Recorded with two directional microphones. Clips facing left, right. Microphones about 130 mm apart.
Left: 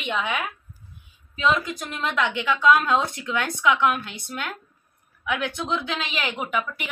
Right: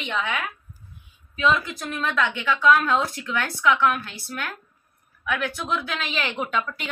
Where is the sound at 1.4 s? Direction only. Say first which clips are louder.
Right 1 dB; 15° left (ahead or behind).